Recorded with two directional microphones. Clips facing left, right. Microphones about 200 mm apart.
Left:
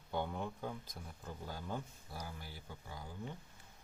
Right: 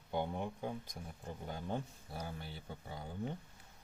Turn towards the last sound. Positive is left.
turn(degrees=-30)  # may be behind; listen again after turning